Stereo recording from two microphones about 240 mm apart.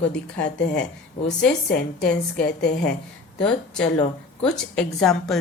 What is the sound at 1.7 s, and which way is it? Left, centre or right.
Speech, left.